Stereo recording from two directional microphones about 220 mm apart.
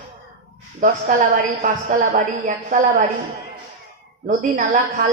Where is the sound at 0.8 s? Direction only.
35° right (ahead or behind).